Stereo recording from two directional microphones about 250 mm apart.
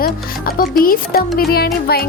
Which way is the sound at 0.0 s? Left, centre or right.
Left.